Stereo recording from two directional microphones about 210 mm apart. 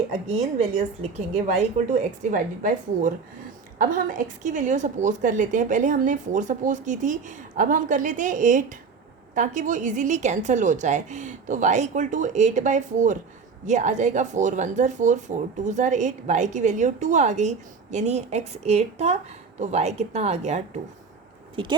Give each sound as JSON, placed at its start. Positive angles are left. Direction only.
{"t": 0.3, "sound": "speech", "side_deg": -30}